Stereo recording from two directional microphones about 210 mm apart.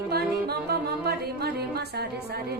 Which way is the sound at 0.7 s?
50° right (ahead or behind).